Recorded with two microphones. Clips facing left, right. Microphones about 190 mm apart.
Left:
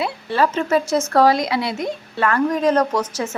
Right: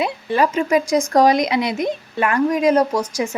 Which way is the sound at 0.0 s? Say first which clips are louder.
Right 1 dB; 15° right (ahead or behind).